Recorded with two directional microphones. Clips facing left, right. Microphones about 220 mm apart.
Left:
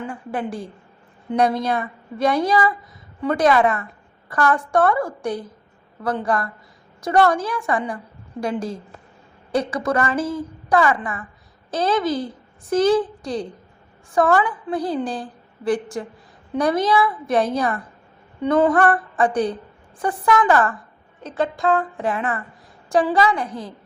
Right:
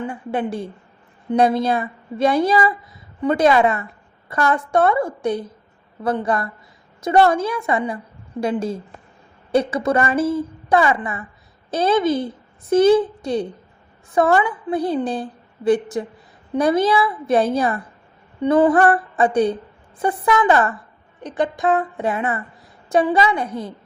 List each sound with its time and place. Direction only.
0.1 s a woman's voice: 25° right (ahead or behind)